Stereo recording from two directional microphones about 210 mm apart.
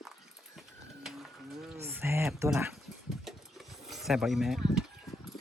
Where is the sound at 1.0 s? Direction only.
Centre (ahead or behind).